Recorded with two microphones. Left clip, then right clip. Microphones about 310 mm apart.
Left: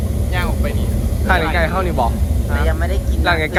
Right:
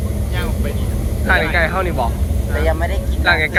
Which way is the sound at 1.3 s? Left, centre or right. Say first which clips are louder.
Right 1 dB; centre.